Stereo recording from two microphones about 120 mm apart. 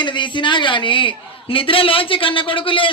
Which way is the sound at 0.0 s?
40° left (ahead or behind).